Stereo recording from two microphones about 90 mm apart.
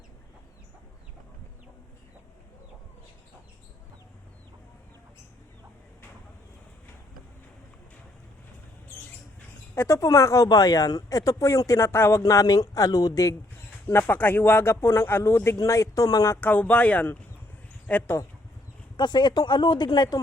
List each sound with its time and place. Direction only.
9.7 s speech: 35° left (ahead or behind)
12.2 s speech: 40° left (ahead or behind)
13.8 s speech: 20° left (ahead or behind); by 16.3 s 40° left (ahead or behind)
16.3 s speech: 20° left (ahead or behind)
18.9 s speech: 55° left (ahead or behind)